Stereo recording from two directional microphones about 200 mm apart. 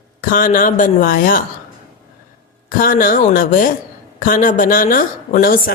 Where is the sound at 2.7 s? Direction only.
45° left (ahead or behind).